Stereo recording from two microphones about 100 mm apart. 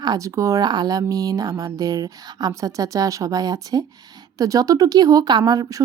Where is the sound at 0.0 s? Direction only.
40° right (ahead or behind).